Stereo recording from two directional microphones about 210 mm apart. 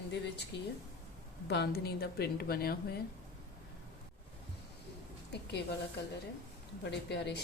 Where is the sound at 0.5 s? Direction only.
55° left (ahead or behind).